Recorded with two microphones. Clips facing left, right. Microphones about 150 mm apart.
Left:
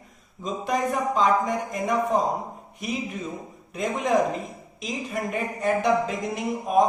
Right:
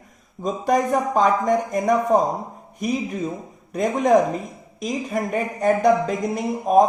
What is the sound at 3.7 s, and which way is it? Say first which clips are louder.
A woman's voice: right 6 dB; 45° right (ahead or behind).